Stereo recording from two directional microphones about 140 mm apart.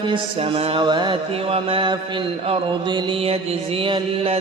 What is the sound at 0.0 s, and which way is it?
Mantra, 40° right (ahead or behind).